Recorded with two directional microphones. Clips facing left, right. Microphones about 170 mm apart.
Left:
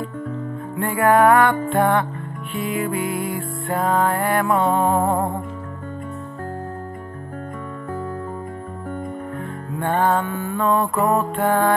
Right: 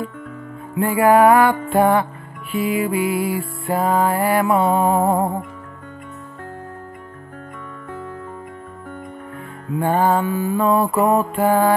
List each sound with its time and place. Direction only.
0.7 s music: 5° right (ahead or behind)
9.8 s music: 5° right (ahead or behind)